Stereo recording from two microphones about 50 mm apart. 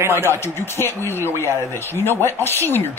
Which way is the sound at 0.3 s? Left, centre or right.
Left.